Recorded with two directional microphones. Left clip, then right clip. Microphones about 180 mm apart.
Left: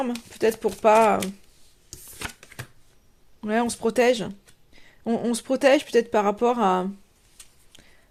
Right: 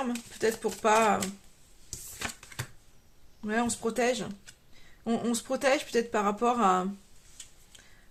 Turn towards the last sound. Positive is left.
turn(degrees=35)  # may be behind; listen again after turning